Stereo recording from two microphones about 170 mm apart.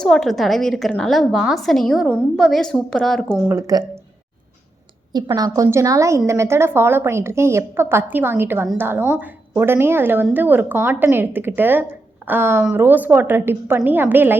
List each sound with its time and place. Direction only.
0.0 s a woman's voice: centre (ahead or behind)
3.5 s speech: 20° right (ahead or behind)
5.3 s a woman's voice: 15° right (ahead or behind)